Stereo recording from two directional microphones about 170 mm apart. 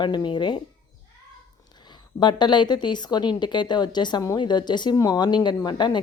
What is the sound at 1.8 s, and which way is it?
A woman's voice, 25° left (ahead or behind).